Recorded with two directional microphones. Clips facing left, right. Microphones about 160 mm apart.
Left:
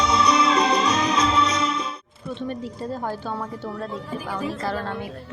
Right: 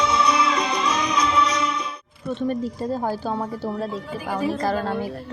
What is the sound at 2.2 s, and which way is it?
Speech, 40° right (ahead or behind).